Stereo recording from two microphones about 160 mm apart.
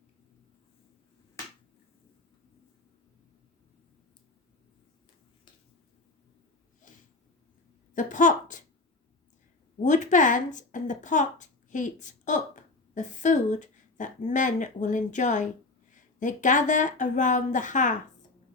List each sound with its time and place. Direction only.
6.8 s snort: 55° left (ahead or behind)
7.9 s a woman's voice: 55° left (ahead or behind)
9.8 s a woman's voice: 50° left (ahead or behind)